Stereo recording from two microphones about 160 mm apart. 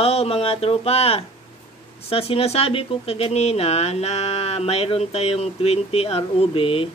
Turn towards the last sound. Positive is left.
turn(degrees=35)  # may be behind; listen again after turning